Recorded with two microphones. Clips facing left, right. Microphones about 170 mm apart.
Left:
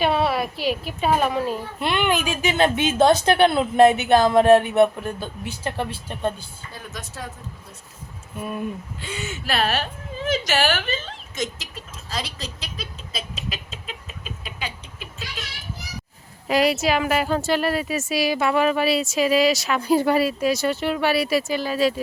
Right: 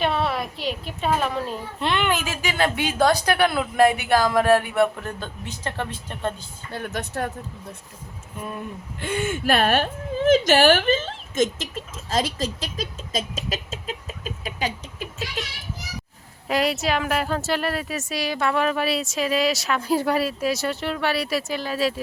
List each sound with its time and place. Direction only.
0.0 s a woman's voice: 5° left (ahead or behind)
1.9 s a woman's voice: 15° left (ahead or behind)
6.7 s speech: 65° right (ahead or behind)
9.0 s speech: 55° right (ahead or behind)
16.5 s a woman's voice: centre (ahead or behind)